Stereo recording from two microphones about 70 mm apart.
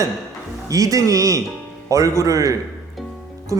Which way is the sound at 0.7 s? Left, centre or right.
Right.